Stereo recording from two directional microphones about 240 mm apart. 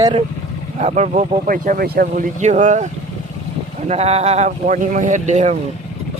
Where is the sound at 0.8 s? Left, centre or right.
Right.